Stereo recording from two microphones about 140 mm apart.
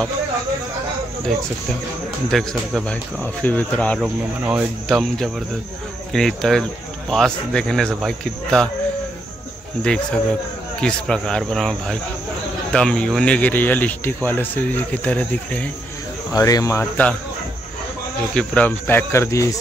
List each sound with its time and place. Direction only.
2.3 s speech: centre (ahead or behind)
4.0 s speech: 10° right (ahead or behind)
4.8 s speech: centre (ahead or behind)
10.8 s speech: 5° left (ahead or behind)
16.3 s speech: 25° left (ahead or behind)
18.3 s speech: 5° left (ahead or behind)